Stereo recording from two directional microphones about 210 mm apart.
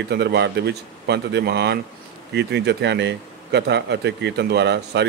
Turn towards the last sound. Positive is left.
turn(degrees=-55)  # may be behind; listen again after turning